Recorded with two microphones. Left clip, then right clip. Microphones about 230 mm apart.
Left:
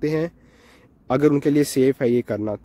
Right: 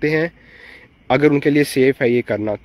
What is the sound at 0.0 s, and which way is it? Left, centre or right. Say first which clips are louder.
Speech: right 5 dB; centre.